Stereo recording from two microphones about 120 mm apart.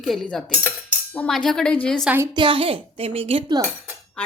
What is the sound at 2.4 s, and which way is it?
A woman's voice, 45° right (ahead or behind).